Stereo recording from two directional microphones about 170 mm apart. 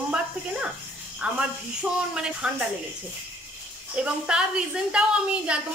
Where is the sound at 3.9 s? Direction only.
5° right (ahead or behind).